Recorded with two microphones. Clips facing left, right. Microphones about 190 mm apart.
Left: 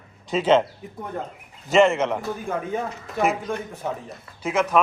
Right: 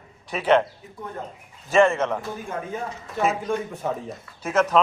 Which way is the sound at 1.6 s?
20° left (ahead or behind).